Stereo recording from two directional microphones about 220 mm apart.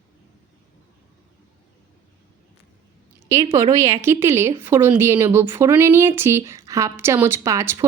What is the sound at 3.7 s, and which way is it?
Speech, 15° right (ahead or behind).